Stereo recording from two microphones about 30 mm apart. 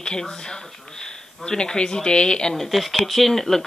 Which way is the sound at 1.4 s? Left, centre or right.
Left.